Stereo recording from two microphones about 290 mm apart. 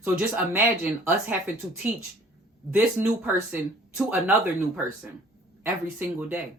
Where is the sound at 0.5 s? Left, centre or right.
Centre.